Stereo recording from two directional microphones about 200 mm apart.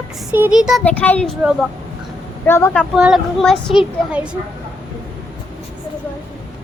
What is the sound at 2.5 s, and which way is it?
Speech, 10° left (ahead or behind).